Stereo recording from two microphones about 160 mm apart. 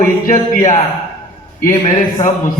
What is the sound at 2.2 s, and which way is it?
Speech, 20° left (ahead or behind).